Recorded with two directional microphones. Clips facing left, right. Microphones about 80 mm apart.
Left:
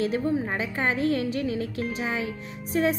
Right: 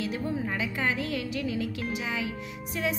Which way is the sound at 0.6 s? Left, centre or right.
Left.